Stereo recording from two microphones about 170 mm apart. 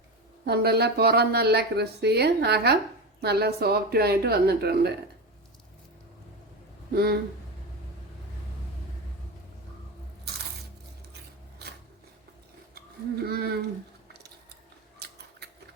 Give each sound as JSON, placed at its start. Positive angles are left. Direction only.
{"t": 0.4, "sound": "speech", "side_deg": -70}
{"t": 6.9, "sound": "speech", "side_deg": -65}
{"t": 13.2, "sound": "speech", "side_deg": -70}
{"t": 14.9, "sound": "scissors", "side_deg": -75}